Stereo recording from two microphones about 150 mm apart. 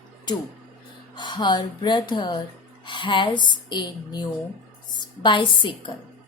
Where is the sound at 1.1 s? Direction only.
30° left (ahead or behind).